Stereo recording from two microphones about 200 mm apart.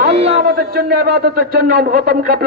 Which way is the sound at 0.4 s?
50° right (ahead or behind).